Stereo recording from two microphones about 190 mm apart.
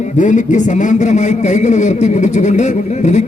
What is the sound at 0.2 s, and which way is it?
A man's voice, 40° left (ahead or behind).